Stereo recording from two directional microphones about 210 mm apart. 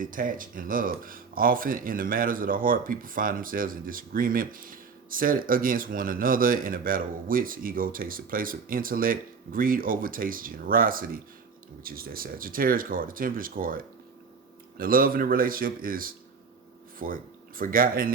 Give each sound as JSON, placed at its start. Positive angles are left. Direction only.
{"t": 0.0, "sound": "a man's voice", "side_deg": -40}